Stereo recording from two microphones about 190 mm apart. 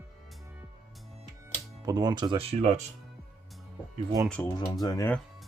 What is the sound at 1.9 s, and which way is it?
Speech, 20° right (ahead or behind).